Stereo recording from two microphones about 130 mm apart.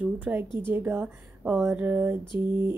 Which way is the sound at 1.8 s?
20° right (ahead or behind).